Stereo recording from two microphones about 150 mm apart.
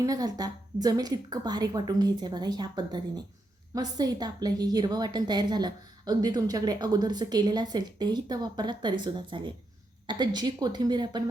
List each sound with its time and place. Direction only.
0.0 s a woman's voice: 25° right (ahead or behind)